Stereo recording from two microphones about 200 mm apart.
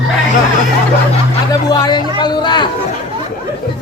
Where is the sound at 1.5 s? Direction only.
20° left (ahead or behind).